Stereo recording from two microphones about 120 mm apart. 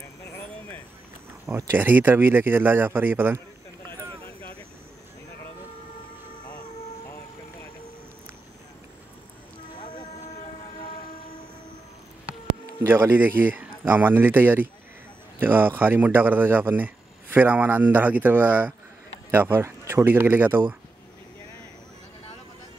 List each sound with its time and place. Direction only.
1.4 s speech: 25° right (ahead or behind)
10.1 s vehicle: 65° left (ahead or behind)
12.6 s speech: 20° right (ahead or behind)